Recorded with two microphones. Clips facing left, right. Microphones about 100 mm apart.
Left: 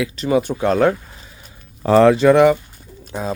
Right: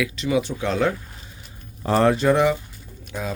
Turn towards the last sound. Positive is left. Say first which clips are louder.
# left 5 dB
turn(degrees=30)  # may be behind; listen again after turning